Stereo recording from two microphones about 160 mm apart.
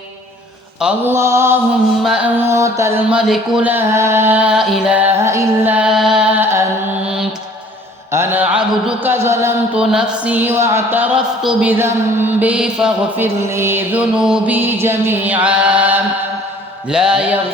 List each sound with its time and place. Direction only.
0.8 s speech: 5° right (ahead or behind)
1.1 s speech: 15° right (ahead or behind)
3.1 s music: 5° right (ahead or behind)
7.0 s music: 5° right (ahead or behind)
8.1 s a sound: 15° right (ahead or behind)
9.1 s speech: 15° right (ahead or behind)
13.2 s speech: 15° right (ahead or behind)
16.9 s mantra: 5° right (ahead or behind)